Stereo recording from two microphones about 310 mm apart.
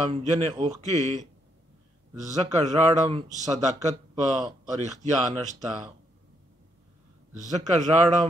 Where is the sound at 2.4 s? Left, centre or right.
Centre.